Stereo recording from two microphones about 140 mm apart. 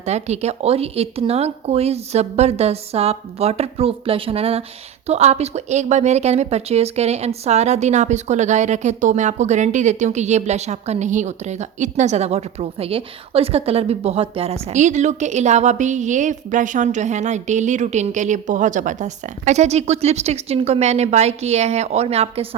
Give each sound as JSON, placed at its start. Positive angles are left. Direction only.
{"t": 0.0, "sound": "speech", "side_deg": -50}